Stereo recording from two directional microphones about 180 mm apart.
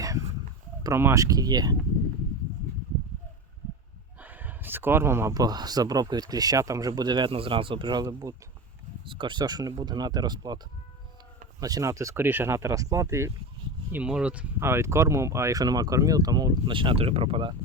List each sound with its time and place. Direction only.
0.8 s speech: 15° right (ahead or behind)
4.2 s speech: 10° right (ahead or behind)
11.6 s speech: 20° right (ahead or behind)